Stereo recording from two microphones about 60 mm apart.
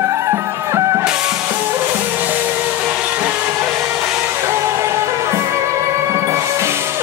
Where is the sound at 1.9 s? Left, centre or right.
Right.